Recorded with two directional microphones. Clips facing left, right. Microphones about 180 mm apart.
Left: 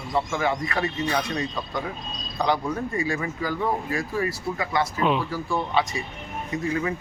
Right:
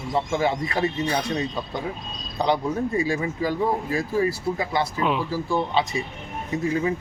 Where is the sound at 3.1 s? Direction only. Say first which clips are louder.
Right 3 dB; 25° right (ahead or behind).